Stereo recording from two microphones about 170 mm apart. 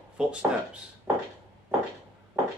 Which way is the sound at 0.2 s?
5° right (ahead or behind).